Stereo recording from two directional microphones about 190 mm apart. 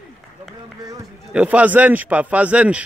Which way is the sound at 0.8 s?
15° right (ahead or behind).